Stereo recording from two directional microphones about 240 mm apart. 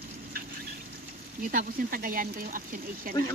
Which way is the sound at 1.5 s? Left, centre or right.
Right.